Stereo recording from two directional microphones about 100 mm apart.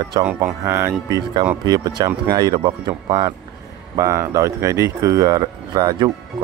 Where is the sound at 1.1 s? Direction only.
50° right (ahead or behind).